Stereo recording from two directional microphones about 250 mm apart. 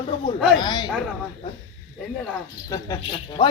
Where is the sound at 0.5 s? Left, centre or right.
Centre.